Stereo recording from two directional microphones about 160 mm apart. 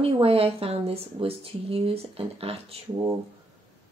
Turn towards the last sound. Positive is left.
turn(degrees=-35)  # may be behind; listen again after turning